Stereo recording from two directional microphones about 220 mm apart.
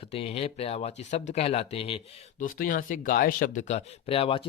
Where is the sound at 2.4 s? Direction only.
40° left (ahead or behind).